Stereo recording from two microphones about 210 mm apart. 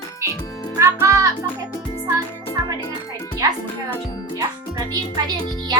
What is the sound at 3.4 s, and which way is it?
Speech, 15° right (ahead or behind).